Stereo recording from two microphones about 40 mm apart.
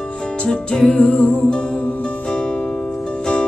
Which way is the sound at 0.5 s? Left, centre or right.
Centre.